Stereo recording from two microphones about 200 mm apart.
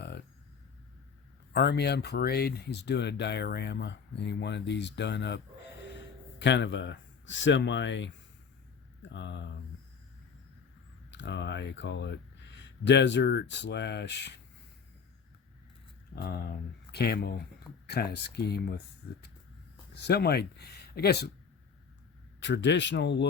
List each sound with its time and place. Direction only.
1.5 s speech: 55° left (ahead or behind)
6.4 s speech: 60° left (ahead or behind)
11.1 s speech: 65° left (ahead or behind)
16.1 s speech: 50° left (ahead or behind)
20.1 s speech: 55° left (ahead or behind)
22.4 s speech: 65° left (ahead or behind)